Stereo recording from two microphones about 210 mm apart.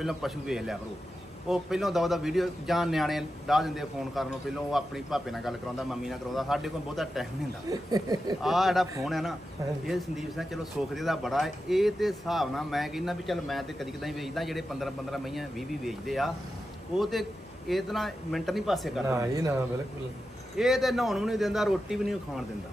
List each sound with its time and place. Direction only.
0.0 s speech: centre (ahead or behind)
7.9 s speech: 20° right (ahead or behind)
8.4 s speech: centre (ahead or behind)
19.0 s speech: 15° right (ahead or behind)
20.5 s speech: centre (ahead or behind)